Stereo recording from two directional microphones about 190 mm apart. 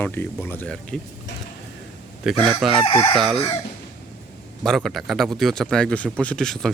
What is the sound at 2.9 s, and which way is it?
Chicken, 25° left (ahead or behind).